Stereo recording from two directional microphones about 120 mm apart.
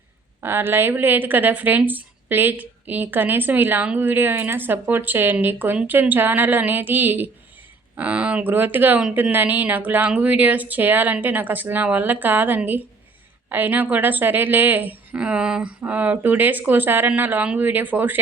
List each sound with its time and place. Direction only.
0.4 s a woman's voice: 20° right (ahead or behind)